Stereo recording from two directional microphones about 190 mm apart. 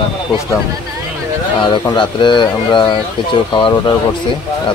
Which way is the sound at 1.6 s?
25° left (ahead or behind).